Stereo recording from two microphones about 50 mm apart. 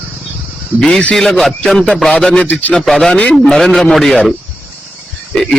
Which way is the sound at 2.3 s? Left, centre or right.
Left.